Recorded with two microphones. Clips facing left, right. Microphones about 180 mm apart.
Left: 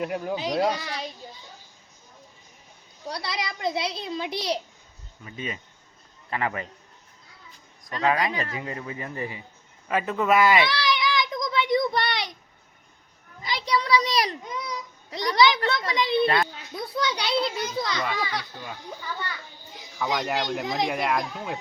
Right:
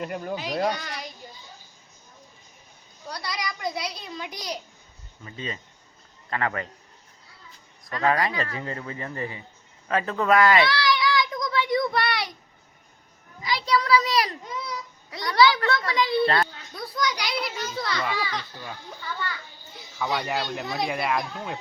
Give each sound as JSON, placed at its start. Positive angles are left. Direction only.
{"t": 0.0, "sound": "speech", "side_deg": 5}
{"t": 3.1, "sound": "a child's voice", "side_deg": 25}
{"t": 5.2, "sound": "speech", "side_deg": 10}
{"t": 7.9, "sound": "speech", "side_deg": 20}
{"t": 9.9, "sound": "a sound", "side_deg": 10}
{"t": 13.7, "sound": "child singing", "side_deg": 15}
{"t": 16.7, "sound": "a child's voice", "side_deg": 30}
{"t": 17.5, "sound": "speech", "side_deg": 15}
{"t": 20.5, "sound": "speech", "side_deg": 10}